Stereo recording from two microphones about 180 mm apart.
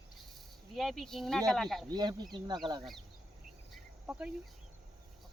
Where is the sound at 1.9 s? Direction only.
25° right (ahead or behind).